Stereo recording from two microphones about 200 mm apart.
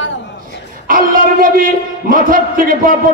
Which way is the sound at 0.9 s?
45° right (ahead or behind).